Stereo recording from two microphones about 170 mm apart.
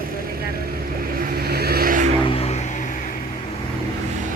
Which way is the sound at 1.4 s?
65° right (ahead or behind).